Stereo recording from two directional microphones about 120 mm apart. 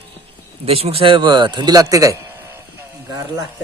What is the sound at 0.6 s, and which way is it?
A man's voice, 55° right (ahead or behind).